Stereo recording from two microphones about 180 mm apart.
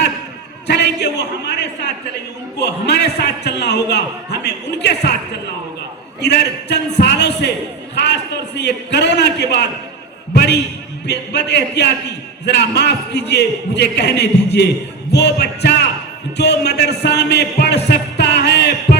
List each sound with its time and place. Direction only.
0.7 s a man's voice: 70° left (ahead or behind)
6.1 s a man's voice: 70° left (ahead or behind)
7.9 s a man's voice: 70° left (ahead or behind)
17.8 s music: 70° left (ahead or behind)